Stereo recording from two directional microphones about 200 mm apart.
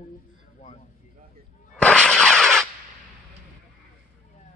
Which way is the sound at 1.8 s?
5° left (ahead or behind).